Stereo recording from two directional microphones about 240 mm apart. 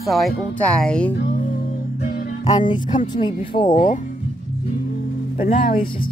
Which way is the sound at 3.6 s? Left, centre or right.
Left.